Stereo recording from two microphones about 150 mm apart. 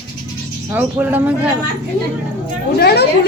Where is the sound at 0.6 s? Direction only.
15° right (ahead or behind).